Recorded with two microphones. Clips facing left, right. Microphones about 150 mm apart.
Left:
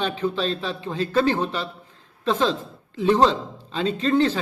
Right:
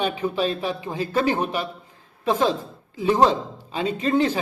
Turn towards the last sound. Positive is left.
turn(degrees=-15)  # may be behind; listen again after turning